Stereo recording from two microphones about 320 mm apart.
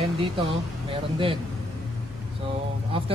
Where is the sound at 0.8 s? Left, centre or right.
Centre.